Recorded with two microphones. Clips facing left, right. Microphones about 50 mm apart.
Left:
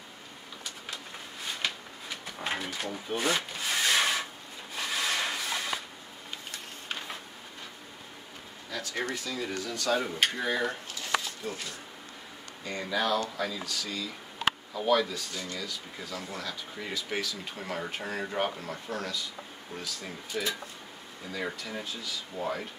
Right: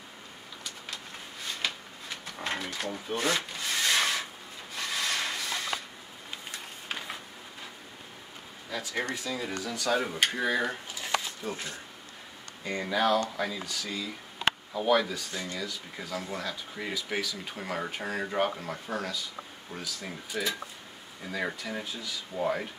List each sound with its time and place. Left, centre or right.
1.6 s a sound: centre
2.9 s rub: centre
8.6 s a sound: centre
9.1 s speech: centre
9.6 s speech: centre
11.4 s speech: right; by 15.2 s centre
15.3 s speech: right